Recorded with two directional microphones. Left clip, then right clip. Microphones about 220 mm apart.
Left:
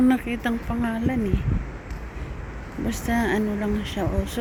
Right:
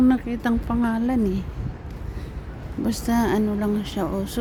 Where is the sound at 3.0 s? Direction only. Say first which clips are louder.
Right 1 dB; 15° right (ahead or behind).